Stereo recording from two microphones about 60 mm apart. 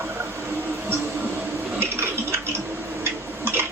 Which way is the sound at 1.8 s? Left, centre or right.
Right.